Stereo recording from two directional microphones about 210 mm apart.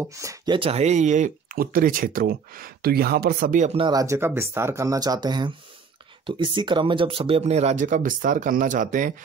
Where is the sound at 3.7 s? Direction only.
20° right (ahead or behind).